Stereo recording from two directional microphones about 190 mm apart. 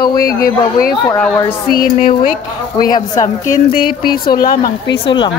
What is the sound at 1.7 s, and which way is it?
Speech, 45° left (ahead or behind).